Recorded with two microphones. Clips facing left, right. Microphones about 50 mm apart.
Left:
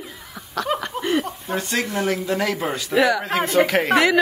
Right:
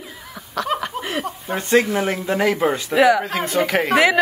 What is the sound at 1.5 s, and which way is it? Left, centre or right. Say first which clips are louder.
Speech: right 6 dB; centre.